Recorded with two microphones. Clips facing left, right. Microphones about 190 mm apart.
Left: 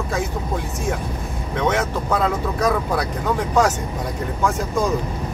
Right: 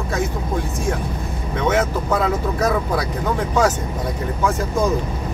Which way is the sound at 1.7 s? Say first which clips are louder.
Right 4 dB; 5° right (ahead or behind).